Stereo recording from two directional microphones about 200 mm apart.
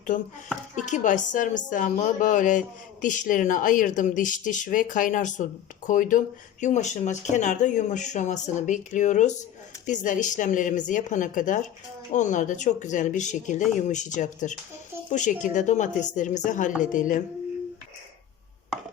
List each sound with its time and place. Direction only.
0.1 s a woman's voice: 40° left (ahead or behind)